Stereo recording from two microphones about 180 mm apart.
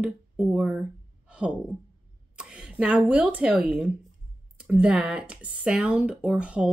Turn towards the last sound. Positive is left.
turn(degrees=-5)  # may be behind; listen again after turning